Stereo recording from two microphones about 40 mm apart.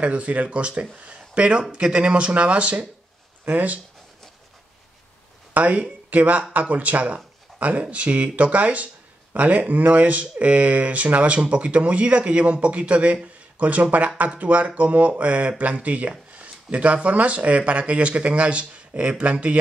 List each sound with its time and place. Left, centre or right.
0.0 s speech: right
3.4 s speech: right
5.5 s speech: right